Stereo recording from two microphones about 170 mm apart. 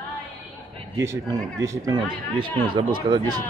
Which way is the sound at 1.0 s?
15° right (ahead or behind).